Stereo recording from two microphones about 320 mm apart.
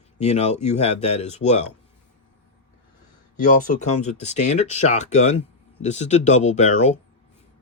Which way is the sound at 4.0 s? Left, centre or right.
Left.